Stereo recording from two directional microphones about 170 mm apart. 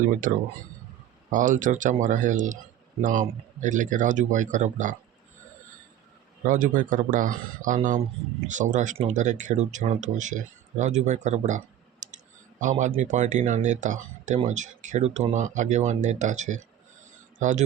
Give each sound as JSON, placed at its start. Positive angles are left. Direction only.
{"t": 0.0, "sound": "speech", "side_deg": -50}
{"t": 6.4, "sound": "speech", "side_deg": -50}
{"t": 10.8, "sound": "clicking", "side_deg": -45}
{"t": 13.0, "sound": "speech", "side_deg": -45}